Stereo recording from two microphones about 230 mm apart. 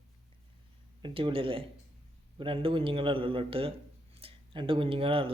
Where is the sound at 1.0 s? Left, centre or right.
Right.